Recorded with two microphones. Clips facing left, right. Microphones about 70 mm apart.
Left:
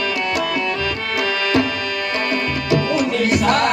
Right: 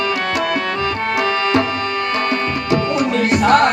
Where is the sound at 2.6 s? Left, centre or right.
Right.